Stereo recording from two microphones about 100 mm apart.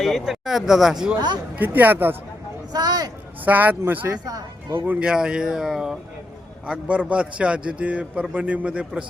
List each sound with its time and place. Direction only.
0.0 s speech: centre (ahead or behind)
1.5 s speech: 20° right (ahead or behind)
2.7 s speech: 40° right (ahead or behind)
3.4 s a man's voice: 15° right (ahead or behind)